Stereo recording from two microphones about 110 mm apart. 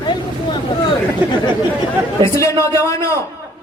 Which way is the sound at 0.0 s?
45° left (ahead or behind).